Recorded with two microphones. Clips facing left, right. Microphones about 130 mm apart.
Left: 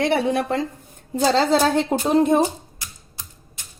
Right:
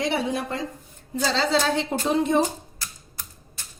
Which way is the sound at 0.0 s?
60° left (ahead or behind).